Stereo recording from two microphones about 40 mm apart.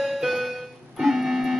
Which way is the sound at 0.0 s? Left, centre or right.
Centre.